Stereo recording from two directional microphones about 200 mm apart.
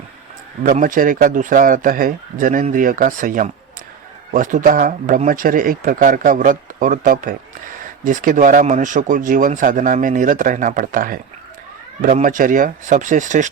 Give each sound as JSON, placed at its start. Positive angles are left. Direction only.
{"t": 0.6, "sound": "speech", "side_deg": -45}